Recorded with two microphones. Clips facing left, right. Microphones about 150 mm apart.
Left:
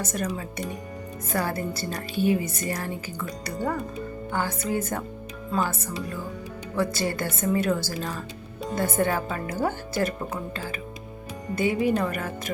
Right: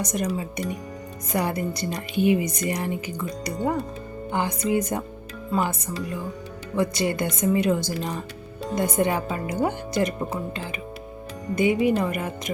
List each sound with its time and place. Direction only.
0.0 s speech: 15° right (ahead or behind)
6.7 s speech: 15° right (ahead or behind)
11.5 s speech: 15° right (ahead or behind)